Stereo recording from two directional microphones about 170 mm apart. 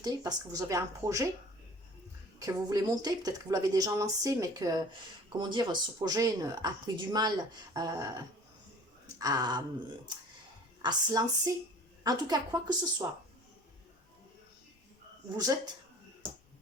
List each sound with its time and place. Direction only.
0.0 s speech: 20° right (ahead or behind)
2.4 s speech: 20° right (ahead or behind)
9.1 s speech: 20° right (ahead or behind)
10.8 s speech: 20° right (ahead or behind)
15.4 s speech: 25° right (ahead or behind)